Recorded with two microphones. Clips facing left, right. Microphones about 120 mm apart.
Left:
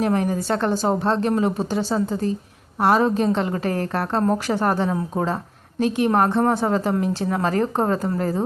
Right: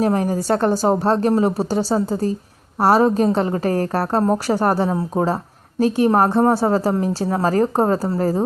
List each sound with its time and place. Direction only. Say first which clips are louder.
0.0 s a woman's voice: right 2 dB; 30° right (ahead or behind)